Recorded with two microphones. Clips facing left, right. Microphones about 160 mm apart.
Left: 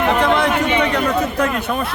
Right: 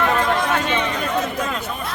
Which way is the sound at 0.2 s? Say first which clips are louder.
Left 4 dB; 70° left (ahead or behind).